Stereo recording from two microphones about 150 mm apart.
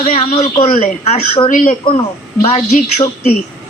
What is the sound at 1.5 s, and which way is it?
Speech, 60° left (ahead or behind).